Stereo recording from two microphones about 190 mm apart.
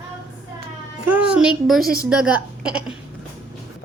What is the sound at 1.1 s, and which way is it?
Speech, 5° right (ahead or behind).